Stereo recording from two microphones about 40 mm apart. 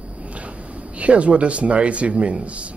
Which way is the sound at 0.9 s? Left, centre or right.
Right.